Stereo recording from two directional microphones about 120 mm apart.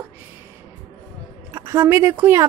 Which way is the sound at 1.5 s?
20° right (ahead or behind).